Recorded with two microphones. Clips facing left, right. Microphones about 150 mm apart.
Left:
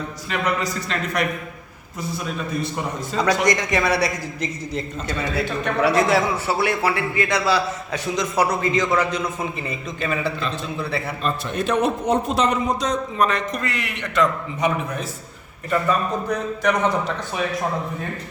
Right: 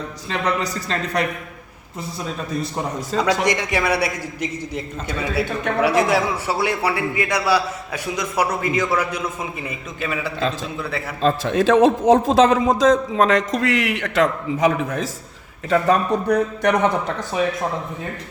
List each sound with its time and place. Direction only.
0.3 s a woman's voice: 30° right (ahead or behind)
3.4 s a man's voice: 5° right (ahead or behind)
11.2 s a man's voice: 90° right
15.7 s a man's voice: 75° right (ahead or behind)